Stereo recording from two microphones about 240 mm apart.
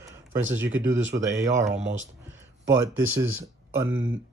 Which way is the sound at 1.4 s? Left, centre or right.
Right.